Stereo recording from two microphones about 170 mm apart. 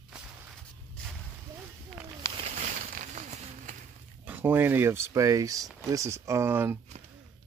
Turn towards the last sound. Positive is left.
turn(degrees=-15)  # may be behind; listen again after turning